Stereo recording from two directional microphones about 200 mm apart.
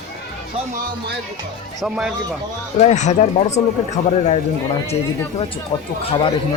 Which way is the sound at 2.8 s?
35° left (ahead or behind).